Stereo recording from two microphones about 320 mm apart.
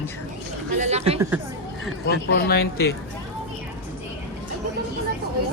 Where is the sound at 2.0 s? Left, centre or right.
Left.